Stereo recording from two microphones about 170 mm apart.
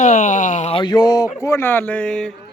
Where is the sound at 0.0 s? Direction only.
50° left (ahead or behind).